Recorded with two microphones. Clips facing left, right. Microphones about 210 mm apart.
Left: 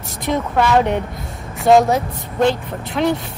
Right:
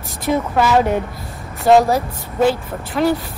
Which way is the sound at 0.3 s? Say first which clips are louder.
Right 1 dB; 5° right (ahead or behind).